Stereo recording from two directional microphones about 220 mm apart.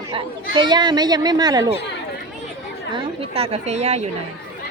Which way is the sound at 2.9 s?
25° right (ahead or behind).